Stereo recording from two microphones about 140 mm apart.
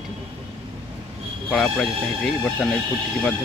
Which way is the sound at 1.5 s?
5° left (ahead or behind).